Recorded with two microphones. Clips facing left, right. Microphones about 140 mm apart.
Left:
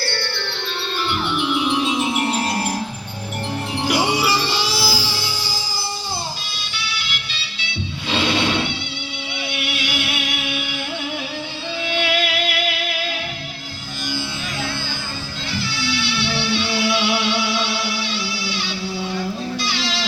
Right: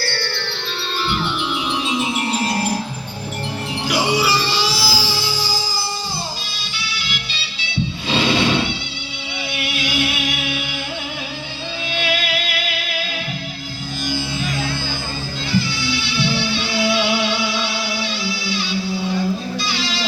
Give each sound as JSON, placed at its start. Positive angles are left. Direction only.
{"t": 0.0, "sound": "music", "side_deg": 20}
{"t": 1.0, "sound": "music", "side_deg": 55}
{"t": 3.8, "sound": "music", "side_deg": 55}
{"t": 11.9, "sound": "music", "side_deg": 65}
{"t": 15.5, "sound": "music", "side_deg": 70}